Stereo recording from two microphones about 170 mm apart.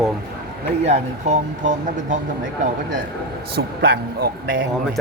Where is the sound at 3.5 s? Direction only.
70° right (ahead or behind).